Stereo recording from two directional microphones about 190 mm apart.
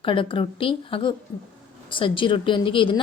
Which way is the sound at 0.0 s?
25° left (ahead or behind).